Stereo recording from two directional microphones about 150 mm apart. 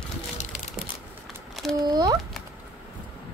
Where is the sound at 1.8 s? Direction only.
25° right (ahead or behind).